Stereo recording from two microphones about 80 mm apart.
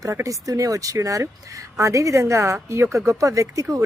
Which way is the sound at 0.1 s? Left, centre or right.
Right.